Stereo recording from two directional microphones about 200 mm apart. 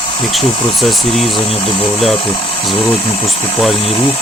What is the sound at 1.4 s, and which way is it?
Speech, 30° left (ahead or behind).